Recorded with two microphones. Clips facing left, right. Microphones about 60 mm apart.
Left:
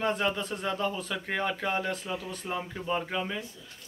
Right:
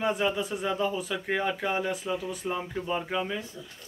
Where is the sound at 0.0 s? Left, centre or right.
Centre.